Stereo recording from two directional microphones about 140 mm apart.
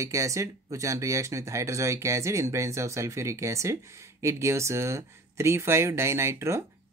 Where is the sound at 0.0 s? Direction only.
20° right (ahead or behind).